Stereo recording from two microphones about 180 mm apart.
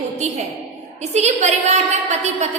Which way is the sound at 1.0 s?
40° right (ahead or behind).